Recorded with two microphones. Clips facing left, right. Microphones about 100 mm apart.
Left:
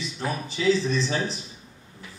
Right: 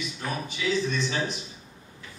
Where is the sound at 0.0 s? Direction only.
30° left (ahead or behind).